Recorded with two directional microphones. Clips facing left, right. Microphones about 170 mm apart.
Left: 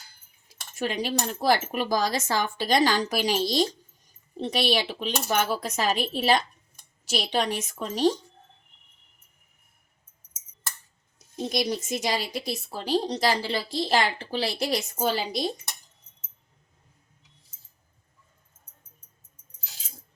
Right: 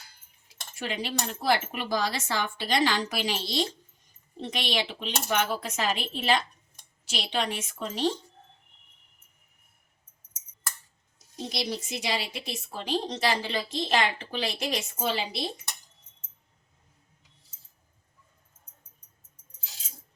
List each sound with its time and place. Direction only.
0.4 s speech: 40° left (ahead or behind)
11.3 s speech: 50° left (ahead or behind)